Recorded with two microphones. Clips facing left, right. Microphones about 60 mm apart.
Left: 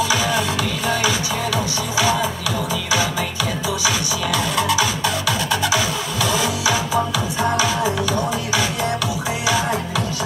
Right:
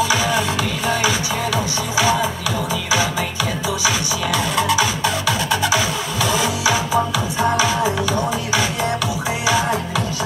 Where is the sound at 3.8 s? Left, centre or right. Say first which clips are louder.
Right 1 dB; right.